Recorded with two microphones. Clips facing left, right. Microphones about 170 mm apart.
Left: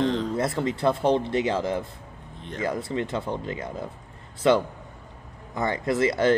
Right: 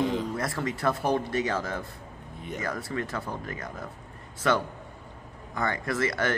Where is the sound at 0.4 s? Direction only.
25° left (ahead or behind).